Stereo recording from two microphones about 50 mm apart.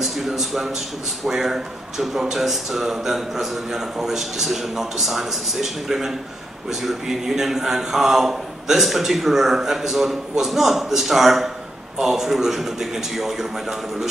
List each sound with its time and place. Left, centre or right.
0.0 s a man's voice: centre